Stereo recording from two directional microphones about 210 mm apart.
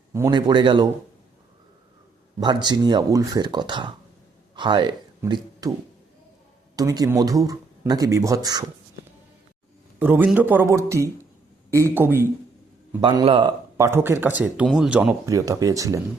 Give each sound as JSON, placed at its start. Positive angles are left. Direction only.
{"t": 0.1, "sound": "speech", "side_deg": -15}
{"t": 2.4, "sound": "speech", "side_deg": -20}
{"t": 6.7, "sound": "speech", "side_deg": -15}
{"t": 10.0, "sound": "speech", "side_deg": -10}
{"t": 13.0, "sound": "speech", "side_deg": -25}
{"t": 15.3, "sound": "speech", "side_deg": -15}